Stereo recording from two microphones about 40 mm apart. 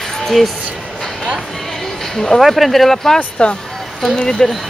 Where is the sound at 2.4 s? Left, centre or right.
Centre.